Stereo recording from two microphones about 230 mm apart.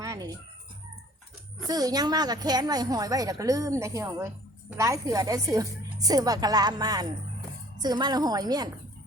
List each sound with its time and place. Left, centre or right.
0.0 s fowl: centre
1.6 s a woman's voice: centre